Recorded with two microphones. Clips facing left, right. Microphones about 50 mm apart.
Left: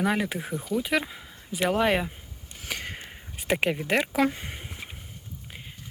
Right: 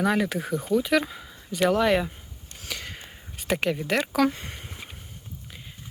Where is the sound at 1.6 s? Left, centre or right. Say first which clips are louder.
Right 2 dB; left.